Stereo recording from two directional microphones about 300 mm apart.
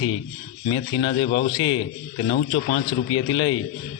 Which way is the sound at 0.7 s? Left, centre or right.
Centre.